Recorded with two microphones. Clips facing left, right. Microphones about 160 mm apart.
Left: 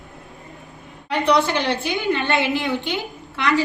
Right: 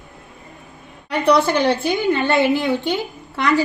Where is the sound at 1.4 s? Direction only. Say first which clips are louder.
Right 5 dB; 45° right (ahead or behind).